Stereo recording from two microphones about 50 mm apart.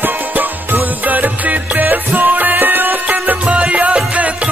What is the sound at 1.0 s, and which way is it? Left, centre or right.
Music, right.